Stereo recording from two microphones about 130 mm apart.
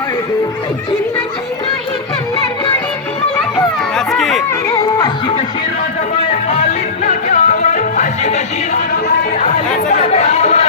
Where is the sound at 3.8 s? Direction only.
5° left (ahead or behind).